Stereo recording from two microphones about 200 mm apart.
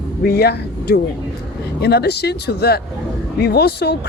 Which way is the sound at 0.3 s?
50° left (ahead or behind).